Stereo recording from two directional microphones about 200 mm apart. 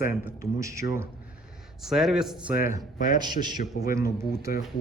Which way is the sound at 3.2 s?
20° right (ahead or behind).